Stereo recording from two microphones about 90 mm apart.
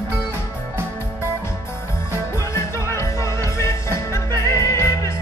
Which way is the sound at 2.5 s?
30° left (ahead or behind).